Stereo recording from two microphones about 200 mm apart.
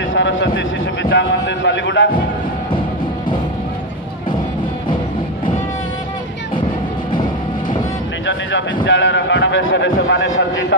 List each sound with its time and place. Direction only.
0.1 s a man's voice: 70° left (ahead or behind)
8.3 s speech: 65° left (ahead or behind)